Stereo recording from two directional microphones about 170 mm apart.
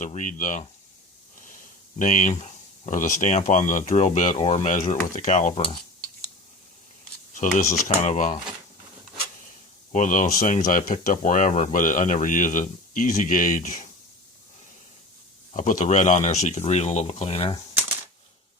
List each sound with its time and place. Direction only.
0.0 s speech: 50° left (ahead or behind)
7.3 s speech: 45° left (ahead or behind)
9.9 s speech: 50° left (ahead or behind)
15.5 s speech: 45° left (ahead or behind)